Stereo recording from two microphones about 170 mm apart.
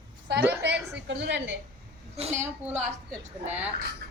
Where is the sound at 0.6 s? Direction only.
90° right.